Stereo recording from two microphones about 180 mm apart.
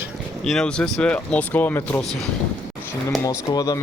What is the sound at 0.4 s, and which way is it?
Speech, 5° left (ahead or behind).